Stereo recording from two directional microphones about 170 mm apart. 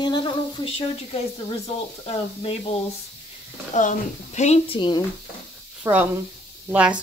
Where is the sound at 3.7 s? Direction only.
45° left (ahead or behind); by 5.0 s 30° left (ahead or behind).